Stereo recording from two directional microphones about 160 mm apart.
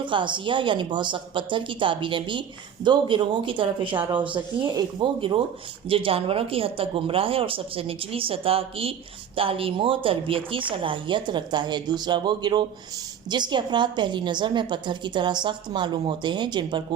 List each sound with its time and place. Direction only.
0.0 s a woman's voice: 30° right (ahead or behind)